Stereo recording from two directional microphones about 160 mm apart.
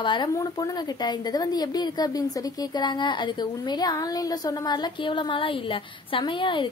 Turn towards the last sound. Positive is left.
turn(degrees=30)  # may be behind; listen again after turning